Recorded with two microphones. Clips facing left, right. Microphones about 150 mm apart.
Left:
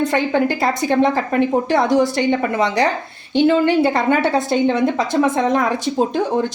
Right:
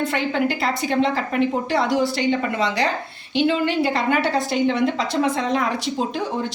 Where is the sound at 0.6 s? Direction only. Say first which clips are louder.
Left 4 dB; 20° left (ahead or behind).